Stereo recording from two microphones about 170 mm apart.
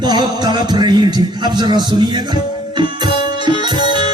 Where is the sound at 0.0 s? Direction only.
25° right (ahead or behind).